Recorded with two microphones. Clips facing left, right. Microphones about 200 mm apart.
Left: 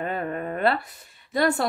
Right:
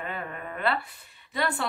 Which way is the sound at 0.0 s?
40° left (ahead or behind).